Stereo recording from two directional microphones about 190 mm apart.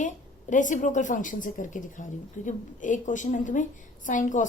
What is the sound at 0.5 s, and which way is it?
A woman's voice, 40° left (ahead or behind).